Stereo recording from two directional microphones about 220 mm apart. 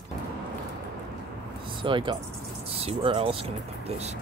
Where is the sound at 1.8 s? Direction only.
20° right (ahead or behind).